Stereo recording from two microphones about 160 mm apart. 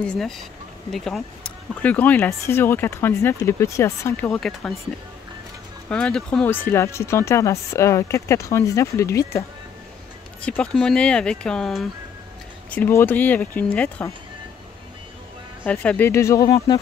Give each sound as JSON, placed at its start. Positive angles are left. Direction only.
{"t": 0.0, "sound": "speech", "side_deg": 5}
{"t": 4.3, "sound": "speech", "side_deg": 0}
{"t": 5.9, "sound": "speech", "side_deg": 5}
{"t": 10.4, "sound": "speech", "side_deg": 5}
{"t": 15.6, "sound": "speech", "side_deg": 10}